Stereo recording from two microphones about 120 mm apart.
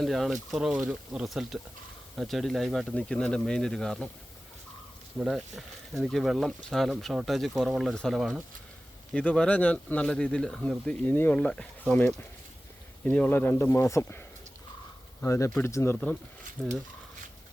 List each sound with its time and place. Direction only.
0.0 s speech: centre (ahead or behind)
5.2 s speech: centre (ahead or behind); by 14.2 s 25° left (ahead or behind)
15.2 s speech: 25° left (ahead or behind)
16.6 s speech: 10° right (ahead or behind)